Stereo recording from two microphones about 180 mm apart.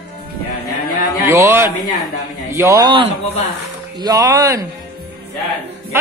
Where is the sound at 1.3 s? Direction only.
15° right (ahead or behind).